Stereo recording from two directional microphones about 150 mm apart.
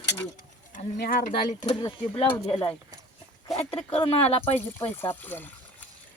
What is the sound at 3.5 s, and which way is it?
Speech, 40° left (ahead or behind).